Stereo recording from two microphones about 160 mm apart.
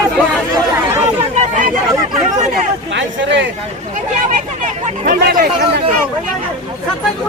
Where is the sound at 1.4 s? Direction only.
55° right (ahead or behind).